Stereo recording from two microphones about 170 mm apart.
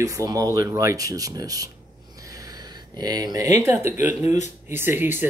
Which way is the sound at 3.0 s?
25° right (ahead or behind).